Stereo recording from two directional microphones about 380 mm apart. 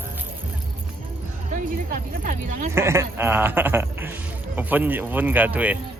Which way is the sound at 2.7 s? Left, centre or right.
Centre.